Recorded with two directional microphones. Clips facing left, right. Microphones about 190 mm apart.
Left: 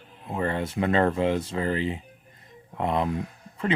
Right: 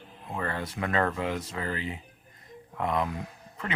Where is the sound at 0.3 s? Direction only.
25° left (ahead or behind).